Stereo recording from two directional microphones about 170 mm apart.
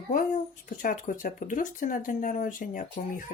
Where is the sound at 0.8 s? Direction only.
50° left (ahead or behind).